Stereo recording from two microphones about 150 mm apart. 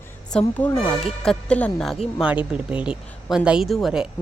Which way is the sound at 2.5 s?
5° right (ahead or behind).